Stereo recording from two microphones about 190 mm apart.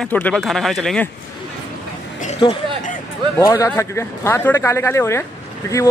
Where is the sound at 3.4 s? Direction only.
15° left (ahead or behind).